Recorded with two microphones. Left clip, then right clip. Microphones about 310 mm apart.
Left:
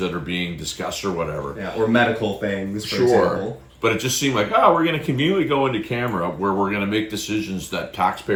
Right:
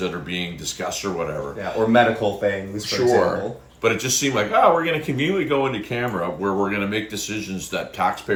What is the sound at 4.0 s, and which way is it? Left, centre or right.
Speech, centre.